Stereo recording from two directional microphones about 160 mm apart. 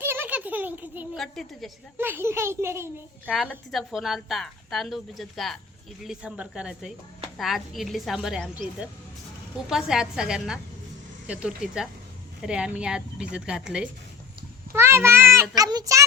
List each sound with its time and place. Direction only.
0.0 s a sound: 15° right (ahead or behind)
1.1 s a woman's voice: centre (ahead or behind)
2.0 s a child's voice: 15° right (ahead or behind)
3.5 s a woman's voice: centre (ahead or behind)
14.7 s a child's voice: 15° right (ahead or behind)